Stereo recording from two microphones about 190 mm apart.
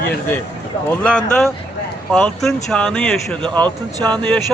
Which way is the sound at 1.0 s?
5° left (ahead or behind).